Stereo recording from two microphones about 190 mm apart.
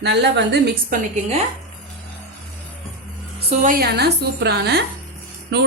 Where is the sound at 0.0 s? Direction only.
65° right (ahead or behind).